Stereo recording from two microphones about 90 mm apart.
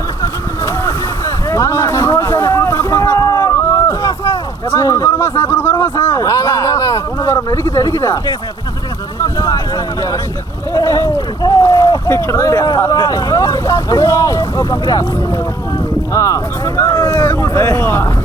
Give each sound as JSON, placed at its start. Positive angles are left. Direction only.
{"t": 1.5, "sound": "a sound", "side_deg": 30}
{"t": 4.7, "sound": "speech", "side_deg": 30}
{"t": 6.2, "sound": "speech", "side_deg": 35}
{"t": 10.8, "sound": "speech", "side_deg": 35}
{"t": 11.6, "sound": "boat", "side_deg": 35}
{"t": 12.0, "sound": "speech", "side_deg": 30}
{"t": 12.9, "sound": "speech", "side_deg": 45}
{"t": 16.1, "sound": "speech", "side_deg": 35}
{"t": 17.1, "sound": "speech", "side_deg": 15}
{"t": 17.5, "sound": "speech", "side_deg": 40}
{"t": 17.7, "sound": "speech", "side_deg": 25}